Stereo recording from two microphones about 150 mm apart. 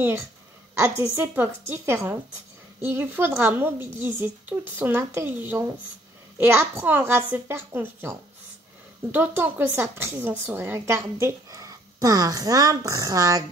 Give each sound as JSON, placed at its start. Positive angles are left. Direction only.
{"t": 0.7, "sound": "a woman's voice", "side_deg": -15}